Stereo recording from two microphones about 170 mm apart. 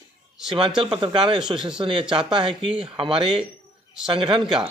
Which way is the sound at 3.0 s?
30° right (ahead or behind).